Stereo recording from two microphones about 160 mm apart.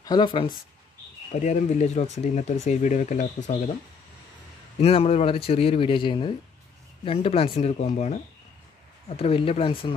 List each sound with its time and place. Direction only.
0.0 s speech: 30° left (ahead or behind)
1.4 s speech: 50° left (ahead or behind)
4.7 s speech: 40° left (ahead or behind)
9.1 s speech: 35° left (ahead or behind)